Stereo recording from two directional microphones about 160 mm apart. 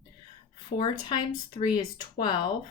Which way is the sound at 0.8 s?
30° left (ahead or behind).